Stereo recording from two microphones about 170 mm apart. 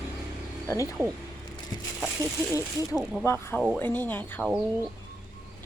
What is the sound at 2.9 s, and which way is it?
A woman's voice, 5° left (ahead or behind).